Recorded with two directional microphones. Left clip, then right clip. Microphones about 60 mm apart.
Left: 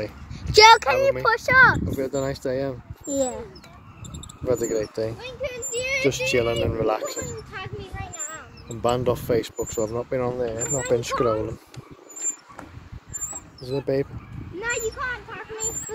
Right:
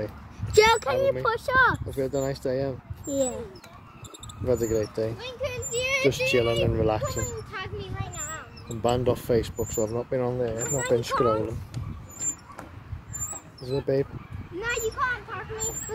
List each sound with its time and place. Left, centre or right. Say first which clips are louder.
0.5 s speech: left 7 dB; centre
1.0 s speech: left 4 dB; right
2.0 s speech: left 1 dB; centre
4.5 s speech: left 1 dB; centre; by 6.0 s right
6.0 s speech: left 1 dB; centre
7.5 s a sound: even; centre
8.8 s speech: left 2 dB; centre
10.8 s speech: left 1 dB; centre
13.6 s speech: left 1 dB; centre
14.6 s a sound: even; right